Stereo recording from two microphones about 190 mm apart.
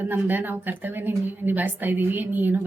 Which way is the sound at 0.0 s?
10° right (ahead or behind).